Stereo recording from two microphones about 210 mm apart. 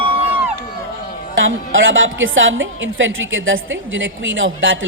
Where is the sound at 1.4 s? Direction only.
65° right (ahead or behind).